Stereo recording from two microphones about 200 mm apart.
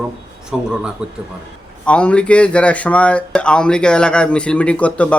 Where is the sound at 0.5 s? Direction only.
5° right (ahead or behind).